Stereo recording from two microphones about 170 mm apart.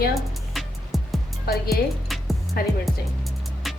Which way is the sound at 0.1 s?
Centre (ahead or behind).